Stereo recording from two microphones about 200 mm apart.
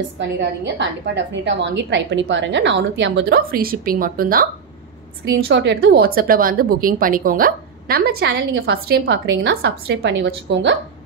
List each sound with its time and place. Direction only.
0.2 s a woman's voice: 60° right (ahead or behind); by 4.5 s 45° right (ahead or behind)
5.5 s a woman's voice: 65° right (ahead or behind)